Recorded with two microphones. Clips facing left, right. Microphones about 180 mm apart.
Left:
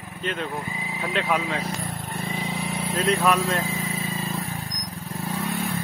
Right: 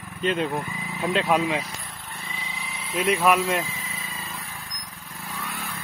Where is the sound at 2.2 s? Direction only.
50° left (ahead or behind).